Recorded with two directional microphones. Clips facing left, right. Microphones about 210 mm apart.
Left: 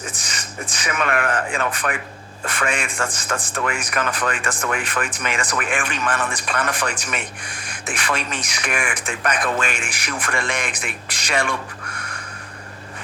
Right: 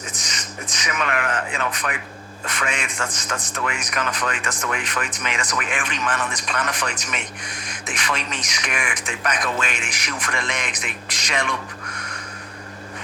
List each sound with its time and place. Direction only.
0.8 s speech: 50° left (ahead or behind)